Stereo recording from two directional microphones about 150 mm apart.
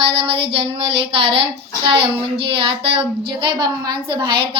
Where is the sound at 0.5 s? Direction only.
40° right (ahead or behind).